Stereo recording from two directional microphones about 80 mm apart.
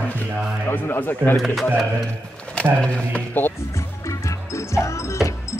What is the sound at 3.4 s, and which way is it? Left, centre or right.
Speech, left.